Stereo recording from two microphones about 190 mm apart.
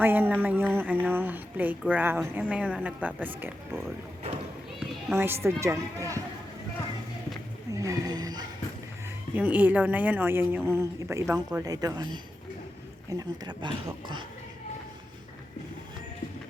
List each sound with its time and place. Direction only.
0.0 s a woman's voice: 10° right (ahead or behind)
5.1 s a woman's voice: 15° right (ahead or behind)
7.7 s a sound: 15° right (ahead or behind)
9.3 s a woman's voice: 10° right (ahead or behind); by 14.3 s 25° right (ahead or behind)